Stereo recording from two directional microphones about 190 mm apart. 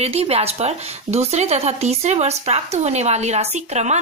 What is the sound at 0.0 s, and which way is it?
Speech, 35° right (ahead or behind).